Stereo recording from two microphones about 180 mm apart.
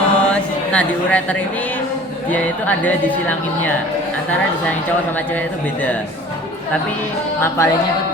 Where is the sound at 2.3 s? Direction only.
10° left (ahead or behind).